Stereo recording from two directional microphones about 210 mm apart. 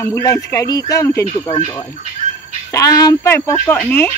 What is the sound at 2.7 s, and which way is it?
Speech, 15° left (ahead or behind).